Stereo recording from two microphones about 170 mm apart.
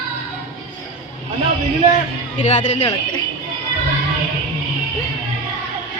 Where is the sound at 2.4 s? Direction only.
45° left (ahead or behind).